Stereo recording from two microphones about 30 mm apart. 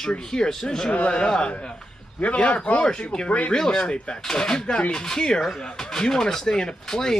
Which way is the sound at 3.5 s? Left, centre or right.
Left.